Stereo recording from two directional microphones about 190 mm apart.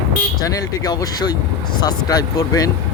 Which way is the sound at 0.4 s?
20° left (ahead or behind).